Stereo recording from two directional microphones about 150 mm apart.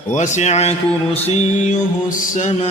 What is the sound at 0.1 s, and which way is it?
Music, 55° left (ahead or behind).